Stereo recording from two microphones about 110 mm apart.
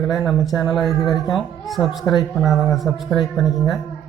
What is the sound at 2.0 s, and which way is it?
Speech, 35° left (ahead or behind).